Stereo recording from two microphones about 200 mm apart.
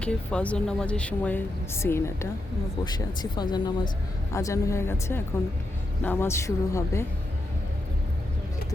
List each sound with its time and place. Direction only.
0.0 s a woman's voice: 5° left (ahead or behind)